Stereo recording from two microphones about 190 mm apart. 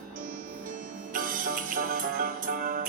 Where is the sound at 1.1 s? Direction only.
45° right (ahead or behind).